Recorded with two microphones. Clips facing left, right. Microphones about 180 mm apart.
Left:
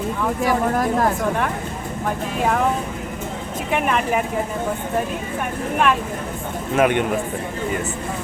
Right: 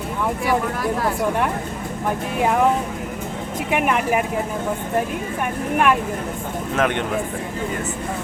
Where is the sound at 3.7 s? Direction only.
10° right (ahead or behind).